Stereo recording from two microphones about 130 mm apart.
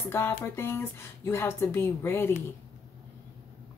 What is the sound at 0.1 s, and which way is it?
Speech, 20° left (ahead or behind).